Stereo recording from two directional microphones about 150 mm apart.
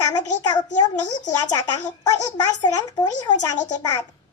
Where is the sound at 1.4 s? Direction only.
25° left (ahead or behind).